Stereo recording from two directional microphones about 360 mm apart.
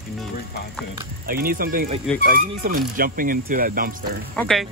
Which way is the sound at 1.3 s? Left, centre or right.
Right.